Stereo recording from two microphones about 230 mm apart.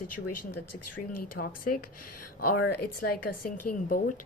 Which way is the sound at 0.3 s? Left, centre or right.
Left.